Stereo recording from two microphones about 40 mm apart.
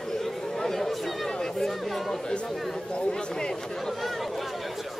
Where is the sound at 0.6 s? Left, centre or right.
Centre.